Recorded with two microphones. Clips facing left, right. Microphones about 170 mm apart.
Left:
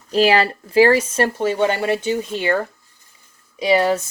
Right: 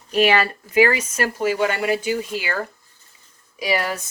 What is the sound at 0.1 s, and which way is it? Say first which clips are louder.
A woman's voice: left 2 dB; 30° left (ahead or behind).